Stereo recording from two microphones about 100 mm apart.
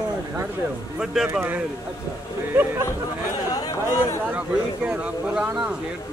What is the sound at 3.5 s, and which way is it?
Speech, 40° left (ahead or behind).